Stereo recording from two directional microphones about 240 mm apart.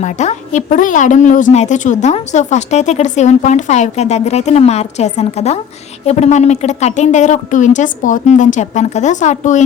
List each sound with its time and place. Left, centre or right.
0.0 s a woman's voice: left